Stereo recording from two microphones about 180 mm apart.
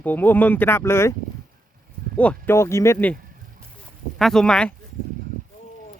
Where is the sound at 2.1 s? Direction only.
10° left (ahead or behind).